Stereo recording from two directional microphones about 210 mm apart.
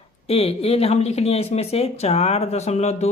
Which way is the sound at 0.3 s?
30° left (ahead or behind).